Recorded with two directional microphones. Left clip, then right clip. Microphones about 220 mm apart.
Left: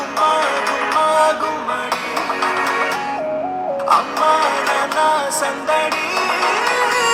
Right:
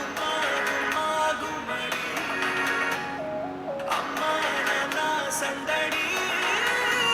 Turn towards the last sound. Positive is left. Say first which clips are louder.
# left 8 dB
turn(degrees=40)  # may be behind; listen again after turning